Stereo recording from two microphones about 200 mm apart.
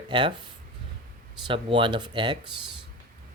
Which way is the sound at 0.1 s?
25° right (ahead or behind).